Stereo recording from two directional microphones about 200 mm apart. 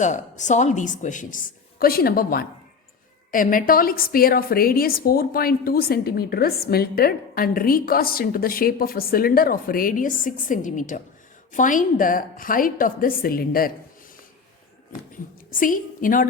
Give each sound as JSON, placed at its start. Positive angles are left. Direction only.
{"t": 0.0, "sound": "a woman's voice", "side_deg": 35}
{"t": 15.4, "sound": "a woman's voice", "side_deg": 40}